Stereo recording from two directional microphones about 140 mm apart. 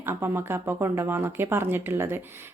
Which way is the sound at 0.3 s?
15° right (ahead or behind).